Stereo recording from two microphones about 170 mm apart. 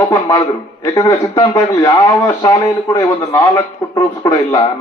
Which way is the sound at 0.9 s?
20° left (ahead or behind).